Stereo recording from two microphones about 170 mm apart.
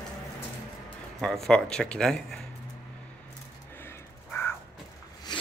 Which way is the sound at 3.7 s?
15° left (ahead or behind).